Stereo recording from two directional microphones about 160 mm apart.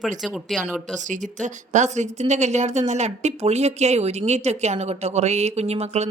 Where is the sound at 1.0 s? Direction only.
50° right (ahead or behind).